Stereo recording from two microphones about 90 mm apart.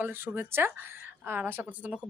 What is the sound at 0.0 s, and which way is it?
A woman's voice, 25° right (ahead or behind).